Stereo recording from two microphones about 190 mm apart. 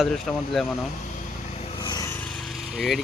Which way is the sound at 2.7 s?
Centre (ahead or behind).